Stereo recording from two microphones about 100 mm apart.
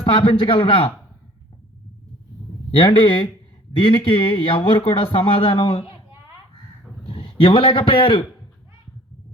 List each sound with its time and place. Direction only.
0.0 s speech: 60° left (ahead or behind)
2.7 s speech: 55° left (ahead or behind)
5.9 s a sound: 25° right (ahead or behind)
7.0 s a man's voice: 65° left (ahead or behind)